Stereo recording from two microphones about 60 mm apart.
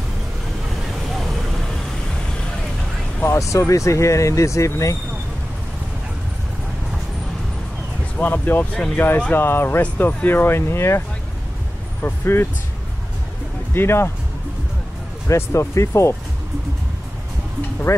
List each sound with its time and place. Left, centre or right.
1.1 s vehicle: centre
3.3 s speech: left
8.2 s speech: left
12.0 s speech: left
13.7 s speech: left
15.2 s speech: left
17.9 s speech: left